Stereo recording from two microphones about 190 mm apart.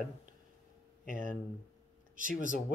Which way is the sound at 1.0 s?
45° right (ahead or behind).